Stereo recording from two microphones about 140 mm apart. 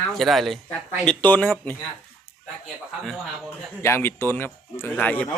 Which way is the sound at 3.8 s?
20° left (ahead or behind).